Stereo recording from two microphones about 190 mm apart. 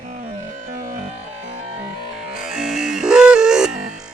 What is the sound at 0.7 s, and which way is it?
Music, 45° right (ahead or behind).